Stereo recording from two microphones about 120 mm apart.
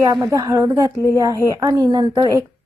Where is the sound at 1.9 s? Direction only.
40° right (ahead or behind).